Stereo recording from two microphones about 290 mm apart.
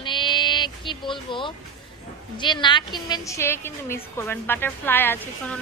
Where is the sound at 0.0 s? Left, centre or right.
Centre.